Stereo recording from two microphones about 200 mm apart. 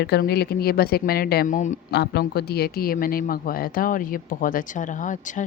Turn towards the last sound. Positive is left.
turn(degrees=40)  # may be behind; listen again after turning